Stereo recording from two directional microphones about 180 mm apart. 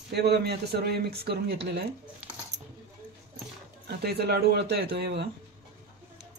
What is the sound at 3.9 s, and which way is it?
Speech, 60° right (ahead or behind).